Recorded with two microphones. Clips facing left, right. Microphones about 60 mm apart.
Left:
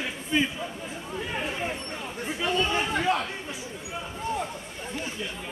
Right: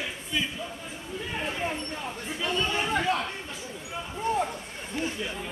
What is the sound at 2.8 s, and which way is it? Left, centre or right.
Speech, centre.